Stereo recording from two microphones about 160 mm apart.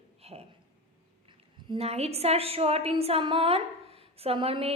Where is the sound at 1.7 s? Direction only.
40° right (ahead or behind).